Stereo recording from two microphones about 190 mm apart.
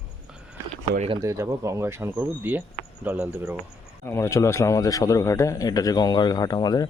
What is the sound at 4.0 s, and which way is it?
A man's voice, 15° left (ahead or behind).